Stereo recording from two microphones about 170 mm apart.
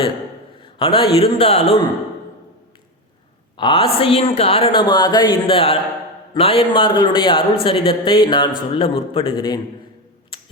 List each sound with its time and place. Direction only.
0.6 s speech: 30° left (ahead or behind)
3.6 s a man's voice: 30° left (ahead or behind)
10.3 s a sound: 30° left (ahead or behind)